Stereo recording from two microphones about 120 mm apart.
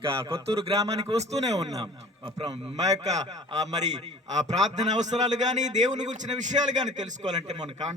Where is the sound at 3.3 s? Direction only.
30° right (ahead or behind).